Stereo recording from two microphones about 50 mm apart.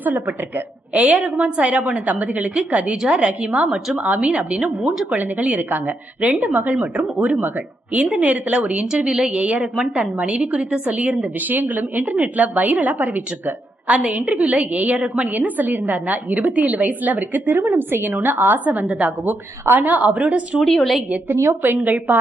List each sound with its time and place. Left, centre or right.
0.0 s a woman's voice: right
0.9 s a woman's voice: right
21.4 s a woman's voice: right
21.8 s a woman's voice: right